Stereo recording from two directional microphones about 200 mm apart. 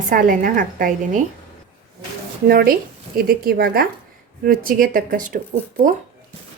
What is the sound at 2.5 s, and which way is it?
Speech, 50° right (ahead or behind).